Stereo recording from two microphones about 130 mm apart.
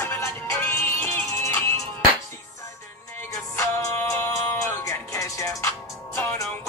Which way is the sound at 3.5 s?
20° left (ahead or behind).